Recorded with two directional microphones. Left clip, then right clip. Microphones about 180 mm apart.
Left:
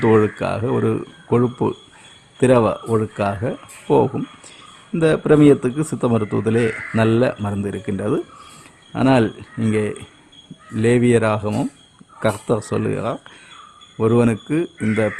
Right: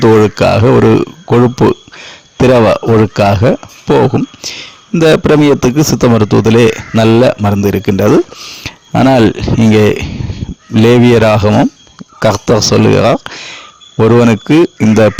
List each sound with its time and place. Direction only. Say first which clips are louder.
0.0 s speech: right 9 dB; 40° right (ahead or behind)
0.4 s speech: right 13 dB; 55° right (ahead or behind)
8.6 s speech: right 9 dB; 60° right (ahead or behind)